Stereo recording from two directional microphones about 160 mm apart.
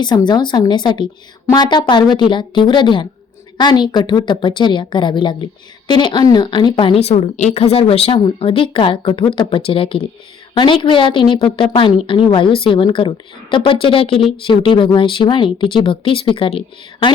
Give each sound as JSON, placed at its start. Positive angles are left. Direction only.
{"t": 0.3, "sound": "a woman's voice", "side_deg": 25}